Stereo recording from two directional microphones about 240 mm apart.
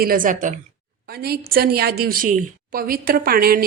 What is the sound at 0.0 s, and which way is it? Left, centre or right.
A woman's voice, right.